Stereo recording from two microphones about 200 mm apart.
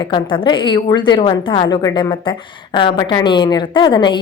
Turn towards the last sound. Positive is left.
turn(degrees=25)  # may be behind; listen again after turning